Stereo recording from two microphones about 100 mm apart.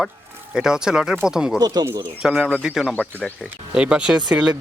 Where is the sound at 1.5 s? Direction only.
40° right (ahead or behind).